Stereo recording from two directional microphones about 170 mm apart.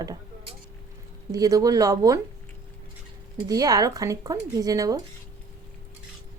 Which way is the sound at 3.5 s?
20° right (ahead or behind).